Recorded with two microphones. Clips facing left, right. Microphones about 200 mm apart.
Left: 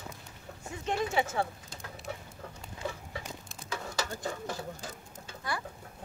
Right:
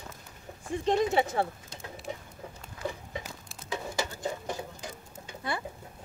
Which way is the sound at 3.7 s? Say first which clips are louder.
Right 2 dB; 20° right (ahead or behind).